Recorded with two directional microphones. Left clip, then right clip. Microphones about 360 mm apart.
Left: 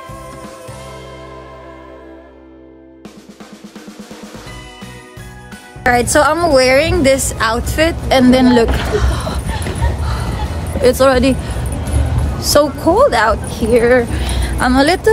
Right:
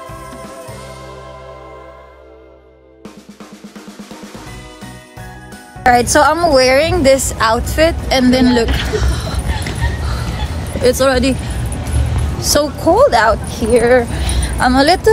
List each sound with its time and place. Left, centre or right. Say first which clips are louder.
5.9 s a woman's voice: right 2 dB; centre
10.8 s a woman's voice: left 2 dB; centre
12.4 s speech: left 3 dB; centre